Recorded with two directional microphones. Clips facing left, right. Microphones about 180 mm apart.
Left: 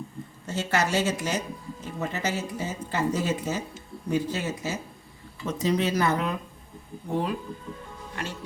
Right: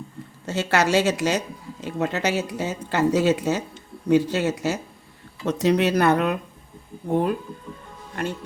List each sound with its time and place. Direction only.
0.4 s speech: 75° right (ahead or behind)
7.1 s speech: 55° right (ahead or behind)